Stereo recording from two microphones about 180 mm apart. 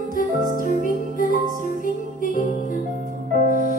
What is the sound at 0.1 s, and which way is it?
Music, 50° left (ahead or behind).